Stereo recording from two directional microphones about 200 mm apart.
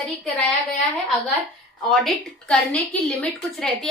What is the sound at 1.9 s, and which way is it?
A woman's voice, 5° left (ahead or behind).